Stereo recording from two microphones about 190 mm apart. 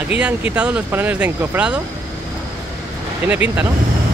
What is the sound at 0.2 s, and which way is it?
Speech, 5° right (ahead or behind).